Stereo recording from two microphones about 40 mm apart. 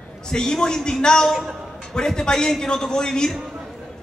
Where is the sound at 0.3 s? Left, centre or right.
Centre.